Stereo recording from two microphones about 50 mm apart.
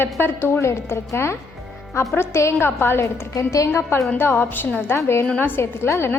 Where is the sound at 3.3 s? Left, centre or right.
Left.